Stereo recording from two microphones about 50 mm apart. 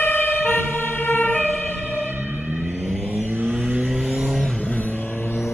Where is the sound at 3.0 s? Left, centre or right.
Right.